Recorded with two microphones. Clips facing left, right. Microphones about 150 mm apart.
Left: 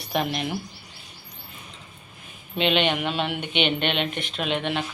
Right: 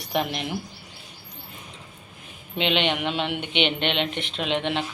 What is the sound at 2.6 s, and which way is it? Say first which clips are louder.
Speech: left 1 dB; 20° right (ahead or behind).